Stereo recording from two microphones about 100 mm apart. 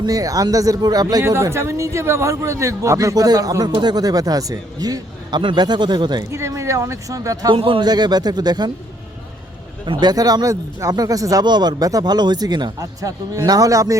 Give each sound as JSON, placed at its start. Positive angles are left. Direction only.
{"t": 0.0, "sound": "a man's voice", "side_deg": -40}
{"t": 1.2, "sound": "a man's voice", "side_deg": -30}
{"t": 3.7, "sound": "a man's voice", "side_deg": -50}
{"t": 5.4, "sound": "speech", "side_deg": -50}
{"t": 6.3, "sound": "a man's voice", "side_deg": -30}
{"t": 7.5, "sound": "speech", "side_deg": -60}
{"t": 9.8, "sound": "a man's voice", "side_deg": -50}
{"t": 12.8, "sound": "a man's voice", "side_deg": -35}